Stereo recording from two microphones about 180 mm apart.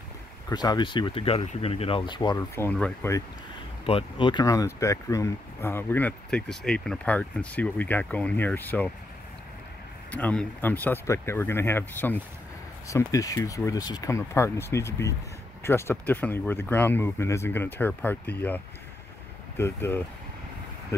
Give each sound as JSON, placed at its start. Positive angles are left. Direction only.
{"t": 0.5, "sound": "speech", "side_deg": 25}
{"t": 2.5, "sound": "speech", "side_deg": 10}
{"t": 3.8, "sound": "speech", "side_deg": 30}
{"t": 10.1, "sound": "speech", "side_deg": 5}